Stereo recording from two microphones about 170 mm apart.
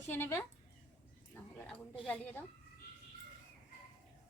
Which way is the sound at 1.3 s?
10° left (ahead or behind).